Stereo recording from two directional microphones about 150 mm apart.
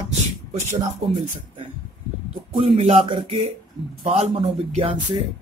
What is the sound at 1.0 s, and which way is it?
Speech, 40° right (ahead or behind).